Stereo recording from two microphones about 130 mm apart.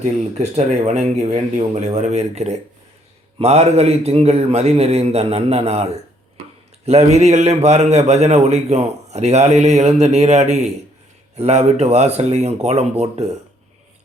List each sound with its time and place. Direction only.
0.0 s a man's voice: 60° right (ahead or behind)